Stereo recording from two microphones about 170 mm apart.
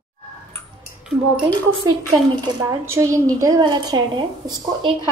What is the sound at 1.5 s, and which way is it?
A woman's voice, 25° right (ahead or behind).